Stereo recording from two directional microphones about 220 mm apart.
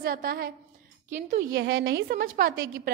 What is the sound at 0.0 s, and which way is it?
Speech, 40° right (ahead or behind).